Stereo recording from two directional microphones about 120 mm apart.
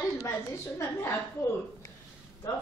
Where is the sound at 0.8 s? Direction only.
20° left (ahead or behind).